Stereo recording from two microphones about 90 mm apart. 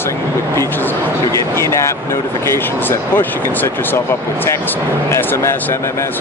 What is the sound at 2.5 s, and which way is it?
Speech, 25° left (ahead or behind).